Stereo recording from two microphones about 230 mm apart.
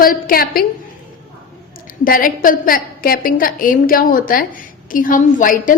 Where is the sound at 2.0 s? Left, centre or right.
Left.